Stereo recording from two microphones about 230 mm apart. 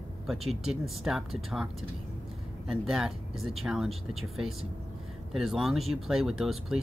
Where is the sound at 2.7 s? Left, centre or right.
Centre.